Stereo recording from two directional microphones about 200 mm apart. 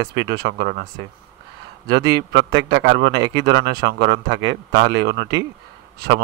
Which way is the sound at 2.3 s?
65° right (ahead or behind).